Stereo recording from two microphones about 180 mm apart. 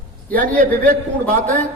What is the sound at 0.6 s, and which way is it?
Speech, 50° right (ahead or behind).